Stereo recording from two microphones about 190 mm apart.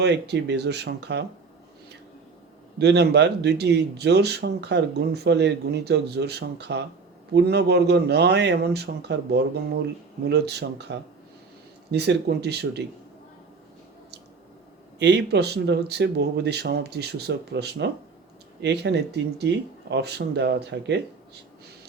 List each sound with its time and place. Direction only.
0.0 s speech: 60° right (ahead or behind)
2.7 s speech: 65° right (ahead or behind)
14.9 s speech: 65° right (ahead or behind)